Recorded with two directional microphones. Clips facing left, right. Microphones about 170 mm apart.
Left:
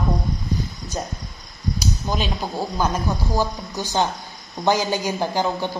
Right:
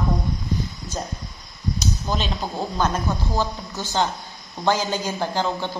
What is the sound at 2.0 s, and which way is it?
A man's voice, 10° left (ahead or behind).